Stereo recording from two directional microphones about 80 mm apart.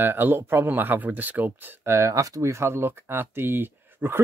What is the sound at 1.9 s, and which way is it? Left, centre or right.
Speech, right.